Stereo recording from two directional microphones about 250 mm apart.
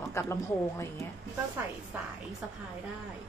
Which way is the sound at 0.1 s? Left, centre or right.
Centre.